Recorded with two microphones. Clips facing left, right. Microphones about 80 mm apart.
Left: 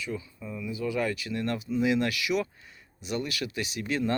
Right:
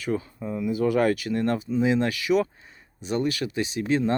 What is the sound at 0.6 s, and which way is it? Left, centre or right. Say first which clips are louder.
Speech: right 8 dB; right.